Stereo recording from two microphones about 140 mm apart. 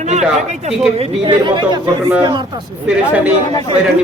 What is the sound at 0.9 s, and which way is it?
Speech, 35° right (ahead or behind).